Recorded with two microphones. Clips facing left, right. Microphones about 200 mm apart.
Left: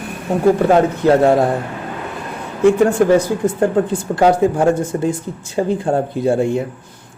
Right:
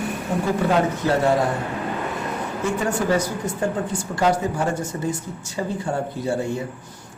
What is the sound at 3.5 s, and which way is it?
A man's voice, 55° left (ahead or behind).